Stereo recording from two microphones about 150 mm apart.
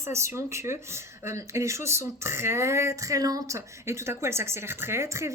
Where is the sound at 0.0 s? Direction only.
15° right (ahead or behind).